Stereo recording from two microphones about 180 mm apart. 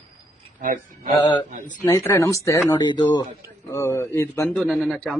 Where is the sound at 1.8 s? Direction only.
15° left (ahead or behind).